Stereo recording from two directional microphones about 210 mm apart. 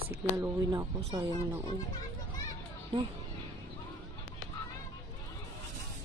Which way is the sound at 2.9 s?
20° right (ahead or behind).